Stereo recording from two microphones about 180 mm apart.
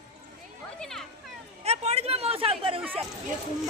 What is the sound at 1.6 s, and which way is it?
Speech, 35° right (ahead or behind).